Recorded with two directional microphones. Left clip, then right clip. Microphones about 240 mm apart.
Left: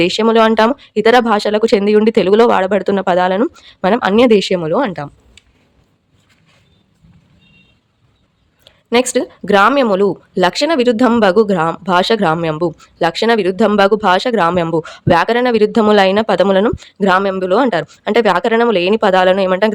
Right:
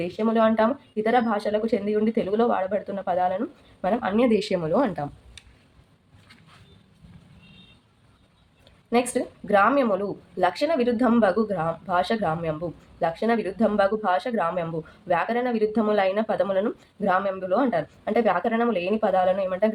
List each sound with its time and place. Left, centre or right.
0.0 s speech: left
8.6 s speech: left